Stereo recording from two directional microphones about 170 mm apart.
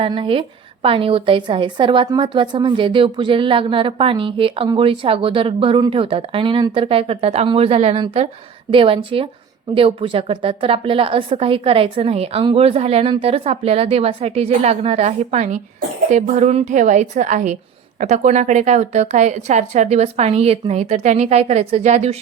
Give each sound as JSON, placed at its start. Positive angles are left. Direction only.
{"t": 0.0, "sound": "a woman's voice", "side_deg": -30}